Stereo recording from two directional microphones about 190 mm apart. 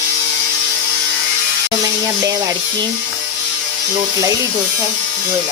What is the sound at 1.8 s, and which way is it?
Speech, 15° right (ahead or behind).